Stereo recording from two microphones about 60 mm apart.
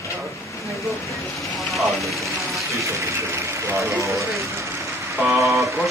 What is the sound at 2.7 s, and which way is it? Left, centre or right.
Speech, right.